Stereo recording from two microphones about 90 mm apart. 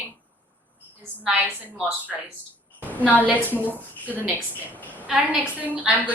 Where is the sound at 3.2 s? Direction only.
20° right (ahead or behind).